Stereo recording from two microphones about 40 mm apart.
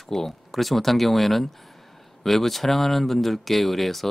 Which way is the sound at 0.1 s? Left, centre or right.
Centre.